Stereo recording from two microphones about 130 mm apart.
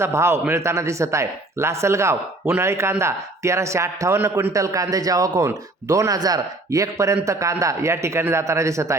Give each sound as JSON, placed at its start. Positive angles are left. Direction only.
{"t": 0.0, "sound": "a man's voice", "side_deg": -20}